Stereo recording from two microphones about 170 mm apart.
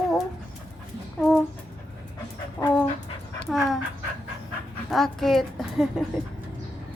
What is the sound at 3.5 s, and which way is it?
Dog, centre (ahead or behind).